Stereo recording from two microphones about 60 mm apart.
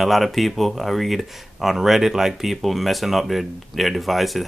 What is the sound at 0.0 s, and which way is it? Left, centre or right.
Speech, centre.